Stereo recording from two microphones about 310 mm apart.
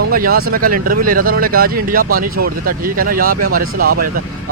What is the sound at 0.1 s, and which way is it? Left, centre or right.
Speech, right.